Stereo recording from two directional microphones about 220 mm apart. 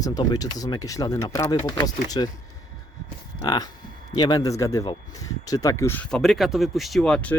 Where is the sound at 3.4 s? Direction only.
20° left (ahead or behind); by 7.3 s 5° left (ahead or behind).